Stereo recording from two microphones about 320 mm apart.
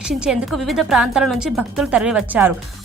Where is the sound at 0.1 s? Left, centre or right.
Centre.